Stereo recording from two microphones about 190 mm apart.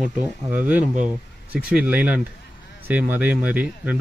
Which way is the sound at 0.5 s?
10° right (ahead or behind).